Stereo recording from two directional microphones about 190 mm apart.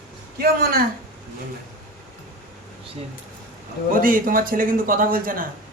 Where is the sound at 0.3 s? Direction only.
50° right (ahead or behind).